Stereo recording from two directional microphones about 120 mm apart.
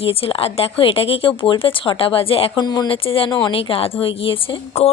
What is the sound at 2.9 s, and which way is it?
Speech, 50° left (ahead or behind).